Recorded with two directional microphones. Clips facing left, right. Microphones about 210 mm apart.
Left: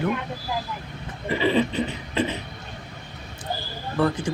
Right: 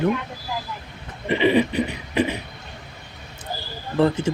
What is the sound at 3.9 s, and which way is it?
Mantra, 25° right (ahead or behind).